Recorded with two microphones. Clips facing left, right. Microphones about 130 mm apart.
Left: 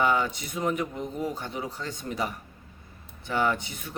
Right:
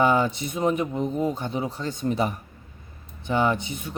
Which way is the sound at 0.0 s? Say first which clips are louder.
Right 4 dB; 25° right (ahead or behind).